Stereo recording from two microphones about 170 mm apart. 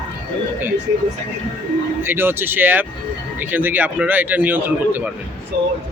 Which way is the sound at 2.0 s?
15° right (ahead or behind).